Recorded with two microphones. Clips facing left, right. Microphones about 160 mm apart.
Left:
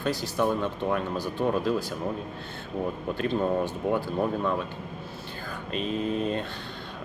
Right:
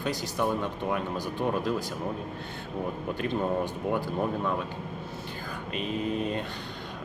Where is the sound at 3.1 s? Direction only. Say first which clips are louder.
Left 3 dB; 15° right (ahead or behind).